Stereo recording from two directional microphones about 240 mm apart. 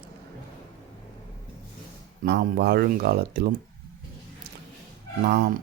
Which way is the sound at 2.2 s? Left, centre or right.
Right.